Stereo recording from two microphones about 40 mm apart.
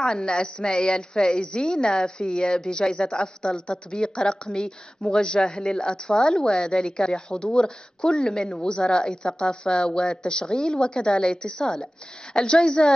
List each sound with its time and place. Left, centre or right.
0.0 s a woman's voice: centre